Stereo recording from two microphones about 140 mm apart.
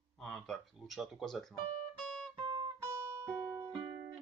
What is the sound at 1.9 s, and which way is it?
Music, 5° left (ahead or behind).